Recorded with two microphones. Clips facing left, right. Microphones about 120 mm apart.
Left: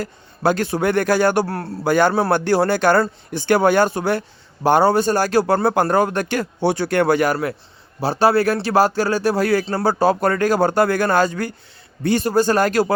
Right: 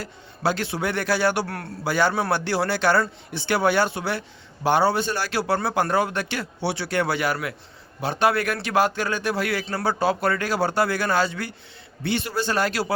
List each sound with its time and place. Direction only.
0.0 s a man's voice: 45° left (ahead or behind)
1.9 s a man's voice: 50° left (ahead or behind)